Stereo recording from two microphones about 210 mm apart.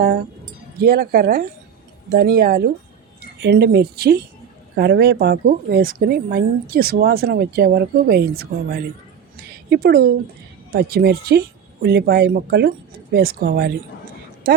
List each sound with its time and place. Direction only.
0.0 s speech: 50° right (ahead or behind)